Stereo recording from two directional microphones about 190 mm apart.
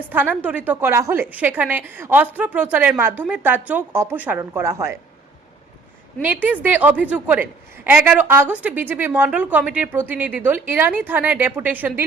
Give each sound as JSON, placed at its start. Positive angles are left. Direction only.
{"t": 0.1, "sound": "speech", "side_deg": -10}
{"t": 6.2, "sound": "speech", "side_deg": -10}